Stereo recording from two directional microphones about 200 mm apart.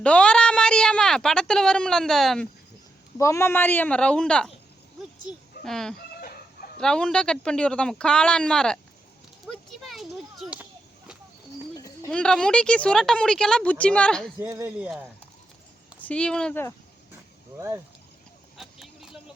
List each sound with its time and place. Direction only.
0.0 s a woman's voice: 5° left (ahead or behind)
3.2 s a woman's voice: 15° left (ahead or behind)
5.6 s a woman's voice: centre (ahead or behind)
6.1 s chicken: 45° left (ahead or behind)
6.7 s a woman's voice: 5° left (ahead or behind)
9.5 s a sound: centre (ahead or behind)
11.8 s a woman's voice: 5° left (ahead or behind)
14.4 s speech: 10° right (ahead or behind)
16.0 s speech: 5° left (ahead or behind)
18.5 s vehicle: centre (ahead or behind)